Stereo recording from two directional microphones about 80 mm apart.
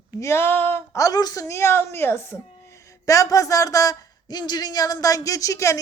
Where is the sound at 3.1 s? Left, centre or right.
Left.